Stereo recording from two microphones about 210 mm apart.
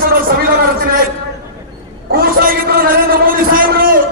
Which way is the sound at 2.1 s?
45° right (ahead or behind).